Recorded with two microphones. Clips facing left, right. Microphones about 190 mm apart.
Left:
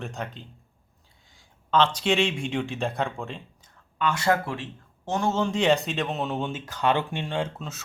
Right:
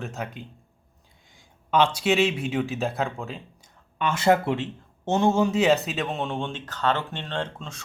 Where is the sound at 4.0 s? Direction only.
25° right (ahead or behind).